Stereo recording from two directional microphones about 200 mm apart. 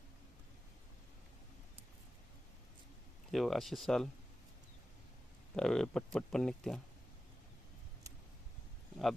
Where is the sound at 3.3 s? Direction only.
Centre (ahead or behind).